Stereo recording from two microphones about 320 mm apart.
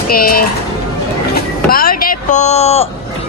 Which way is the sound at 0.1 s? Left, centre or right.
Left.